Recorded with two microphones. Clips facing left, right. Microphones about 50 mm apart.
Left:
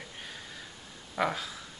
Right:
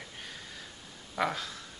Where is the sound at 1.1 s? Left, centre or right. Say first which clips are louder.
Left 1 dB; centre.